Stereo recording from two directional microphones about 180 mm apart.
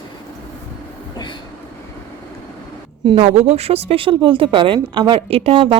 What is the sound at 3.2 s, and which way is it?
A woman's voice, 35° right (ahead or behind).